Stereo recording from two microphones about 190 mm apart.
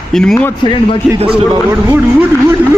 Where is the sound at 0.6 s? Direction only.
25° left (ahead or behind).